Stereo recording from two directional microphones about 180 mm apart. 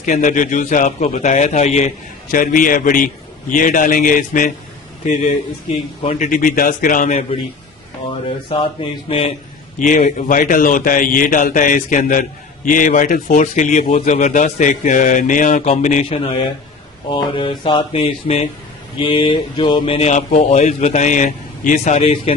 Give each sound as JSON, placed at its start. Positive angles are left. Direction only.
{"t": 0.0, "sound": "a man's voice", "side_deg": 45}
{"t": 2.3, "sound": "a man's voice", "side_deg": 50}
{"t": 8.5, "sound": "speech", "side_deg": 30}
{"t": 9.8, "sound": "a man's voice", "side_deg": 45}
{"t": 17.1, "sound": "a sound", "side_deg": 25}
{"t": 18.9, "sound": "speech", "side_deg": 30}